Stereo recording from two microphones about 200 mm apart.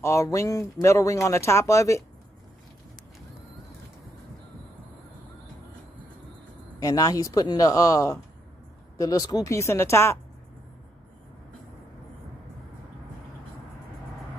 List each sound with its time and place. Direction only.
0.0 s speech: 15° left (ahead or behind)
6.8 s speech: 15° left (ahead or behind)